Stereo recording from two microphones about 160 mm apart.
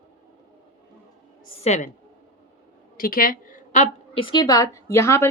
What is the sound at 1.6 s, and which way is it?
Speech, 45° left (ahead or behind).